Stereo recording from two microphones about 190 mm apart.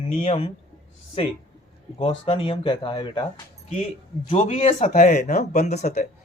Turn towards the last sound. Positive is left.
turn(degrees=35)  # may be behind; listen again after turning